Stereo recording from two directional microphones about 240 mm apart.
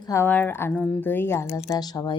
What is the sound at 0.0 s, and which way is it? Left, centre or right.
A woman's voice, centre.